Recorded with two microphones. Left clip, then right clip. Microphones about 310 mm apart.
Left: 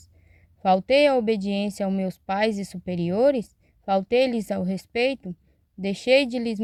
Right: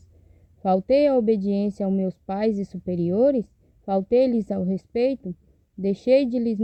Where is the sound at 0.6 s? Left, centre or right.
Centre.